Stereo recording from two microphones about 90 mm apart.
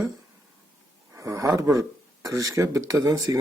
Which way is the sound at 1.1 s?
35° right (ahead or behind).